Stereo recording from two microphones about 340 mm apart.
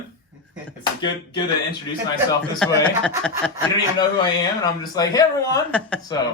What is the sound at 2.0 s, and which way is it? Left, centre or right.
Speech, centre.